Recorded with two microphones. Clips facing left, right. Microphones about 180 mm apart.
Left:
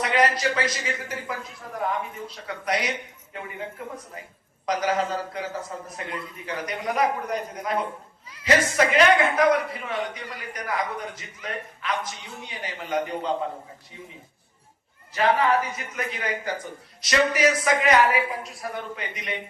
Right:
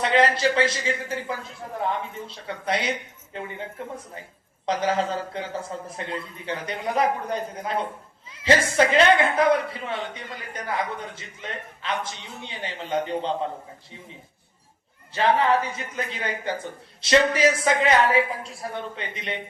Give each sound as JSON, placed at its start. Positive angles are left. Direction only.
{"t": 0.0, "sound": "a child's voice", "side_deg": -25}
{"t": 15.1, "sound": "speech", "side_deg": -25}